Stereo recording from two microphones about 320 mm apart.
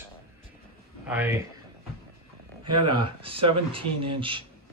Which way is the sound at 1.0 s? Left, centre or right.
Centre.